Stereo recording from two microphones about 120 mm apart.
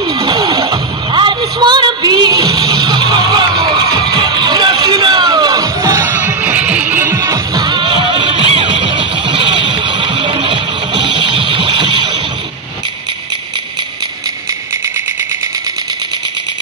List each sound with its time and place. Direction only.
0.2 s music: 40° right (ahead or behind)
6.0 s music: 15° right (ahead or behind); by 12.0 s 45° right (ahead or behind)